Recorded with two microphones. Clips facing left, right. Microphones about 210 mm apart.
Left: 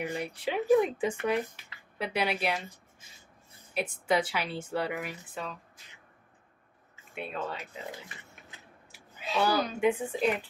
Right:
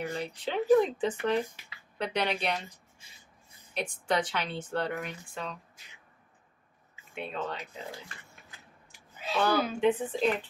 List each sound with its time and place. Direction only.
0.0 s a woman's voice: 15° left (ahead or behind)
3.7 s a woman's voice: 5° left (ahead or behind)
7.2 s speech: 5° left (ahead or behind)
8.1 s a sound: 20° left (ahead or behind)
8.9 s a sound: 5° left (ahead or behind)
9.8 s a woman's voice: 10° left (ahead or behind)